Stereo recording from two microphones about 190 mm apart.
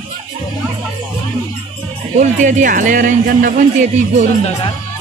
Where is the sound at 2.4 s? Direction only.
40° right (ahead or behind).